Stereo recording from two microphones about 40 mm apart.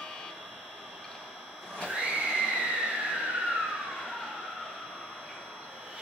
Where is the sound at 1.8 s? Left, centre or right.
Right.